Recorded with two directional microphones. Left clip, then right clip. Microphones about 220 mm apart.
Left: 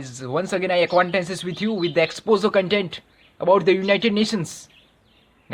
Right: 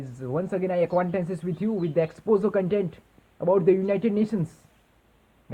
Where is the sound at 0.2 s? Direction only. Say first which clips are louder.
Left 5 dB; 30° left (ahead or behind).